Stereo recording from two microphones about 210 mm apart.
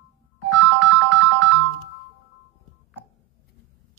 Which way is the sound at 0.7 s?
60° right (ahead or behind).